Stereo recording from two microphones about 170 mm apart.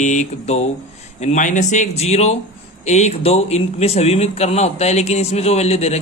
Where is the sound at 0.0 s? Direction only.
45° left (ahead or behind).